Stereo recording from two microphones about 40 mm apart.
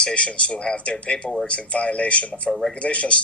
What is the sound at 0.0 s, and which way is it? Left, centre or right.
A man's voice, left.